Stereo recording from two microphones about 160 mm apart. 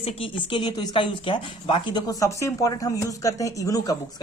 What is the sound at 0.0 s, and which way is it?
Speech, 35° left (ahead or behind).